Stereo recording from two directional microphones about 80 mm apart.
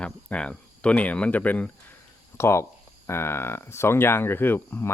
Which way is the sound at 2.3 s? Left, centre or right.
Left.